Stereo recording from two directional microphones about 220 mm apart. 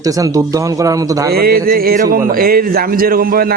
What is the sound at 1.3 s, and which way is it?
A man's voice, 45° right (ahead or behind).